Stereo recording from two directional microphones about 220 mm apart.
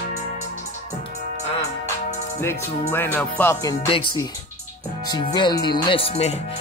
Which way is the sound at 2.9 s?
10° left (ahead or behind).